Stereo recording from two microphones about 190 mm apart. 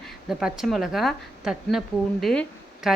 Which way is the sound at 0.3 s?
5° right (ahead or behind).